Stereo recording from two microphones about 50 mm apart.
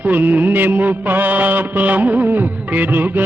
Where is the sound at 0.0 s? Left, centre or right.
Right.